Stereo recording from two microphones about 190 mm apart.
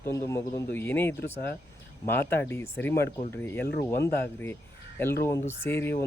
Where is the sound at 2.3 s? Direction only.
15° left (ahead or behind).